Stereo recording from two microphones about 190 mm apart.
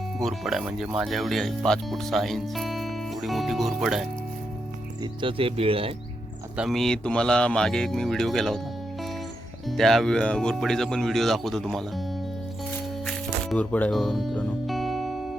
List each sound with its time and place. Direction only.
0.2 s speech: centre (ahead or behind)
5.2 s speech: 30° right (ahead or behind)
6.6 s speech: centre (ahead or behind)
9.6 s speech: centre (ahead or behind)
13.1 s music: 5° left (ahead or behind)